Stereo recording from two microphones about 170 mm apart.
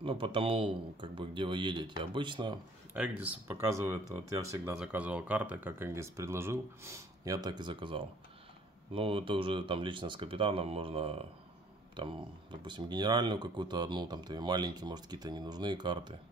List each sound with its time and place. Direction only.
0.0 s speech: 30° right (ahead or behind)
2.9 s speech: 10° right (ahead or behind)
4.7 s speech: 5° right (ahead or behind); by 16.2 s 25° right (ahead or behind)